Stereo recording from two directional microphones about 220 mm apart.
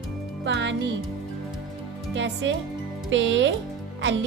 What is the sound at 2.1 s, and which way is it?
Speech, 55° right (ahead or behind).